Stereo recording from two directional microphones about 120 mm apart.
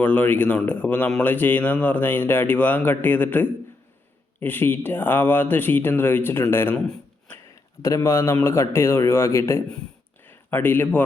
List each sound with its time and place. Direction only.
0.0 s speech: 15° left (ahead or behind)
6.8 s a sound: 5° left (ahead or behind)
7.8 s a man's voice: 25° left (ahead or behind)